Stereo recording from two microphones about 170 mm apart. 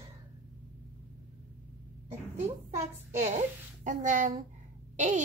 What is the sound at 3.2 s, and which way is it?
Speech, 45° right (ahead or behind).